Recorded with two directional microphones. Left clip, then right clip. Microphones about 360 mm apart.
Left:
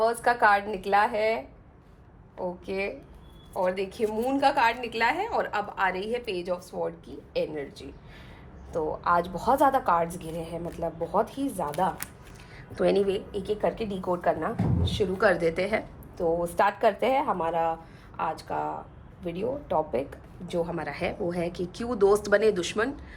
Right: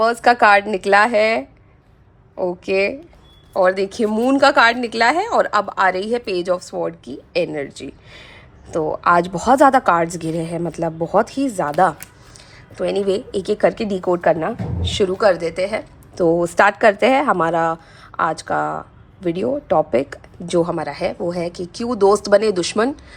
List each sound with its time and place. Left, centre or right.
0.0 s a woman's voice: right
2.6 s a woman's voice: right
9.0 s a woman's voice: right
12.7 s a woman's voice: centre; by 15.0 s right
15.2 s speech: centre
16.2 s a woman's voice: right
20.5 s a woman's voice: centre